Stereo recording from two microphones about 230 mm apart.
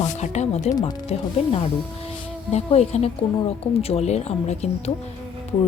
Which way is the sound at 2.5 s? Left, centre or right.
Left.